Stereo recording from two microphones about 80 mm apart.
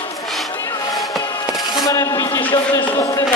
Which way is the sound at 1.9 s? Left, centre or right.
Left.